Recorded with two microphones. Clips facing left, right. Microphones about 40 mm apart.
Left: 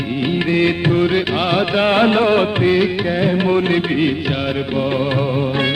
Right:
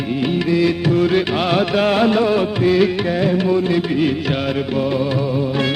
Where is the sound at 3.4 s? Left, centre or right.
Left.